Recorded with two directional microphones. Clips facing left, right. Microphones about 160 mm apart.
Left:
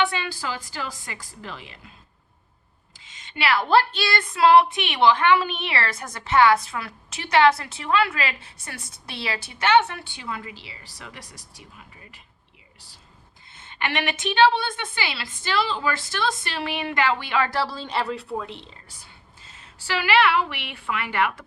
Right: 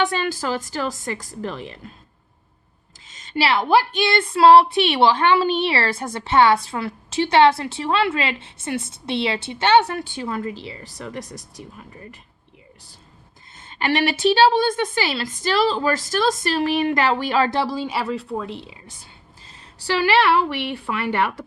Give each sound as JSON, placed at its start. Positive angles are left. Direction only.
{"t": 0.0, "sound": "speech", "side_deg": -45}
{"t": 3.0, "sound": "a sound", "side_deg": -40}
{"t": 3.6, "sound": "a woman's voice", "side_deg": -15}
{"t": 13.6, "sound": "a woman's voice", "side_deg": -35}
{"t": 17.5, "sound": "a woman's voice", "side_deg": -15}
{"t": 19.5, "sound": "a woman's voice", "side_deg": -35}